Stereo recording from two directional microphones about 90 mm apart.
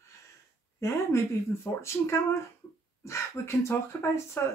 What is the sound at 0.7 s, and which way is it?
Speech, 30° left (ahead or behind).